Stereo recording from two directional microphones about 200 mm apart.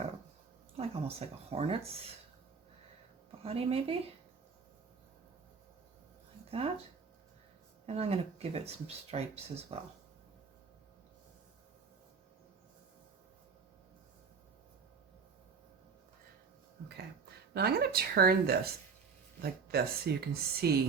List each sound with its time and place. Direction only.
0.8 s speech: 30° right (ahead or behind)
3.4 s speech: 30° right (ahead or behind)
7.9 s speech: 30° right (ahead or behind)
17.5 s speech: 50° right (ahead or behind)